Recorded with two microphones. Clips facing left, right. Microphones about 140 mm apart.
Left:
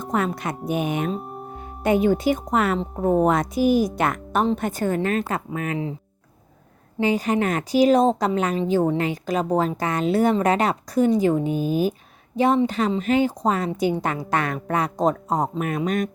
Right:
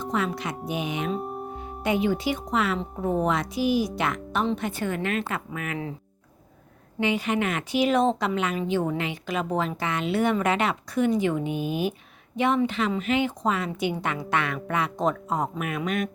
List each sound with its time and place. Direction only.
0.0 s a woman's voice: 50° left (ahead or behind); by 5.8 s 30° left (ahead or behind)
7.0 s a woman's voice: 40° left (ahead or behind)